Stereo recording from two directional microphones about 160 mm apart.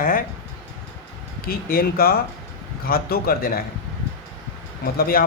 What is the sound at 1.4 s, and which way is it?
Speech, 70° left (ahead or behind).